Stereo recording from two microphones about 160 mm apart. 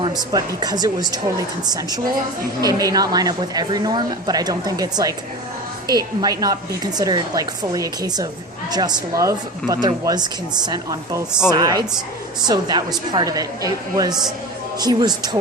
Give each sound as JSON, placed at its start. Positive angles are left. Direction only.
{"t": 0.0, "sound": "a woman's voice", "side_deg": -25}